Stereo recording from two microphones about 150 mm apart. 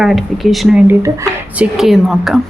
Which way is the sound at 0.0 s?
Centre (ahead or behind).